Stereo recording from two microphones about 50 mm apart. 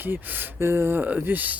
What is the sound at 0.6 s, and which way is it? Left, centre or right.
Speech, right.